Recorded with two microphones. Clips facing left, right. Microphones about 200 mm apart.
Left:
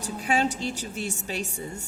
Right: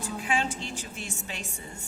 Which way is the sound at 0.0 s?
40° left (ahead or behind).